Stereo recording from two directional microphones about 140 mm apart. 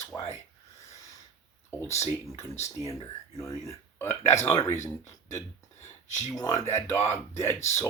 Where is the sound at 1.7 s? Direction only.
20° left (ahead or behind).